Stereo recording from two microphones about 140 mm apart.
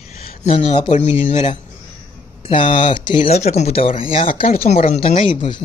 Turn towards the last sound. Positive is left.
turn(degrees=40)  # may be behind; listen again after turning